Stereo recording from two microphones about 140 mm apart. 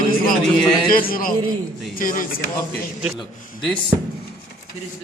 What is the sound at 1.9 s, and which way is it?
Speech, 75° left (ahead or behind).